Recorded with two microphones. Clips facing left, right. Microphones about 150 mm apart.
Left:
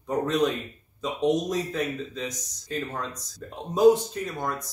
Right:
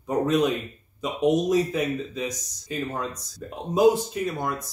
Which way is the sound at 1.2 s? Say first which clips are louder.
Right 4 dB; 10° right (ahead or behind).